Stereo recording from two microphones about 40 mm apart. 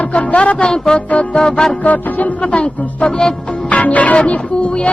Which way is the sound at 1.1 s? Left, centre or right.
Left.